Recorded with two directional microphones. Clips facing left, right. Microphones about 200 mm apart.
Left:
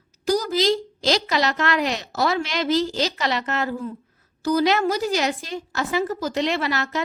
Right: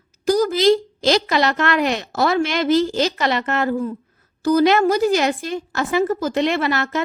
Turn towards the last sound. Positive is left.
turn(degrees=-55)  # may be behind; listen again after turning